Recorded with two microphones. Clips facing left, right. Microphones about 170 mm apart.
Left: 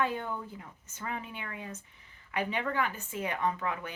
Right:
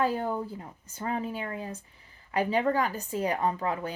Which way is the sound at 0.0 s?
35° right (ahead or behind).